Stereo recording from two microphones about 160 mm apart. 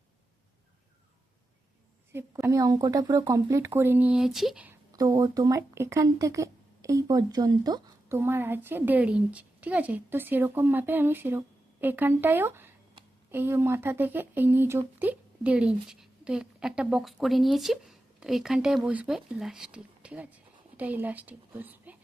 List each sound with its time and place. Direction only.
2.1 s speech: 20° right (ahead or behind)
4.9 s speech: 25° right (ahead or behind)